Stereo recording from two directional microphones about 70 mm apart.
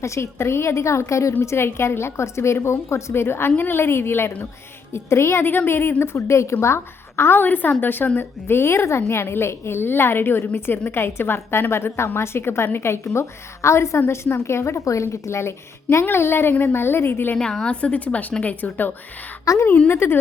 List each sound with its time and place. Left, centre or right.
0.0 s a woman's voice: left
17.3 s a woman's voice: centre; by 18.9 s left
19.5 s a woman's voice: left
19.9 s a woman's voice: left